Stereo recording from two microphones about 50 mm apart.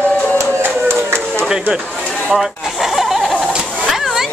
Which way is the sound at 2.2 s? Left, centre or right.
Centre.